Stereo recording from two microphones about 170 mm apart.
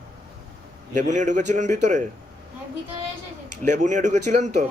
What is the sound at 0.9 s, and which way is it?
Speech, 45° right (ahead or behind).